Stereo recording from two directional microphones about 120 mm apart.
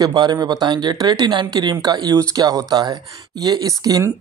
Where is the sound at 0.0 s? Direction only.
35° right (ahead or behind).